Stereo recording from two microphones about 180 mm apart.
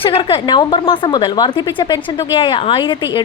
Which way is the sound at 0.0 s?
30° left (ahead or behind).